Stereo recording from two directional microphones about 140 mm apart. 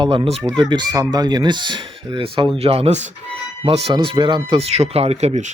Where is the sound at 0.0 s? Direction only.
35° right (ahead or behind).